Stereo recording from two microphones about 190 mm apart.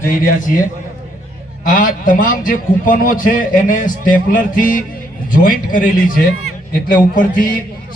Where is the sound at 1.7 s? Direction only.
45° left (ahead or behind).